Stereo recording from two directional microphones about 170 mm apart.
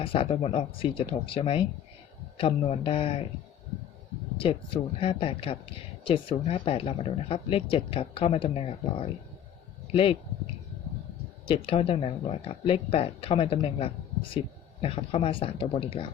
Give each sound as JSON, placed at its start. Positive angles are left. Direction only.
{"t": 0.0, "sound": "speech", "side_deg": 30}
{"t": 4.4, "sound": "speech", "side_deg": 30}